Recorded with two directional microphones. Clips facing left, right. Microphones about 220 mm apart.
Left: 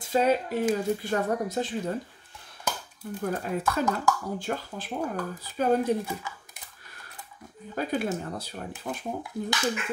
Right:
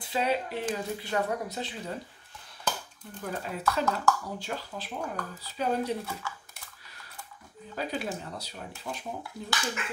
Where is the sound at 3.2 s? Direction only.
50° left (ahead or behind).